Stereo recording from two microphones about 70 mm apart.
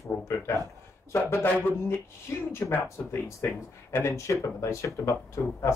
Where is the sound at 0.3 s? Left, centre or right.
Left.